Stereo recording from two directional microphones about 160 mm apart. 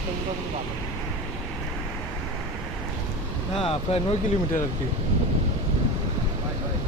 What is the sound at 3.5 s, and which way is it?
Speech, 35° left (ahead or behind).